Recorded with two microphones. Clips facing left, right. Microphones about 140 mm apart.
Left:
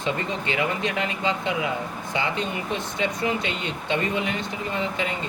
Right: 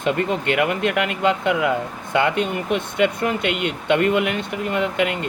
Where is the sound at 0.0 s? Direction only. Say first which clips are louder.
Right 6 dB; 60° right (ahead or behind).